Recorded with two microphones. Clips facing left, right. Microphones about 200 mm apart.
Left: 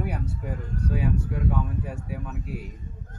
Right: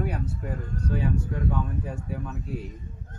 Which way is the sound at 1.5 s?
5° left (ahead or behind).